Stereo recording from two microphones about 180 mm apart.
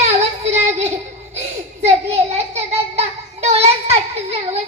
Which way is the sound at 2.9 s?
35° right (ahead or behind).